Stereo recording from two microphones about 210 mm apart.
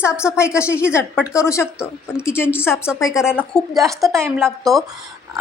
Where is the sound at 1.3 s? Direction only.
15° left (ahead or behind).